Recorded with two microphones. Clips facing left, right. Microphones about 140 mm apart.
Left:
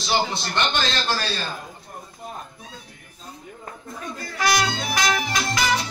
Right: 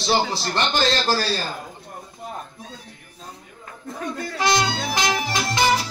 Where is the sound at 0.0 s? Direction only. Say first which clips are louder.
Right 2 dB; 35° right (ahead or behind).